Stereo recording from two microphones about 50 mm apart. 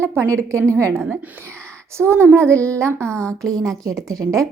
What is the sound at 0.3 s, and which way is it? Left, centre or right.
Speech, right.